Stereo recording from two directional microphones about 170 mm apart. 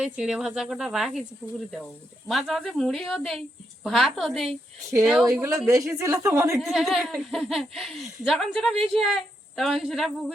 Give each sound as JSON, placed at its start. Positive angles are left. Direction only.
{"t": 0.0, "sound": "a woman's voice", "side_deg": -5}
{"t": 2.2, "sound": "a woman's voice", "side_deg": 0}
{"t": 5.2, "sound": "a woman's voice", "side_deg": -15}
{"t": 6.6, "sound": "a woman's voice", "side_deg": 0}